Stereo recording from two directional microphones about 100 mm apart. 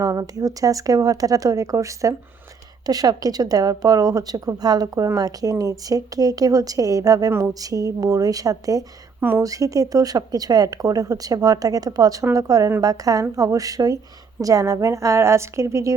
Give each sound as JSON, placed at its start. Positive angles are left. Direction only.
{"t": 0.0, "sound": "a woman's voice", "side_deg": -30}